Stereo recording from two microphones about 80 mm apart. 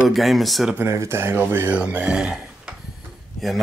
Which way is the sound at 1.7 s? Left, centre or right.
Centre.